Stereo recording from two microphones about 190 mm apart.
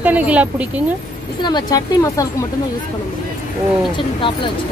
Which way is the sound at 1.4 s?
20° left (ahead or behind).